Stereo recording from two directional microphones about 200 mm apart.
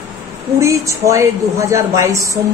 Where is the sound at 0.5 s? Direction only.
15° right (ahead or behind).